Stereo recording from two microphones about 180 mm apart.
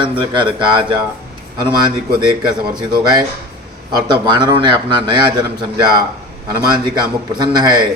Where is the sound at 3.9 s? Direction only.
25° right (ahead or behind).